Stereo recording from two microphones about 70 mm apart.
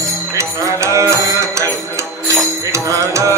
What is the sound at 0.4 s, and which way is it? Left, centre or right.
Music, right.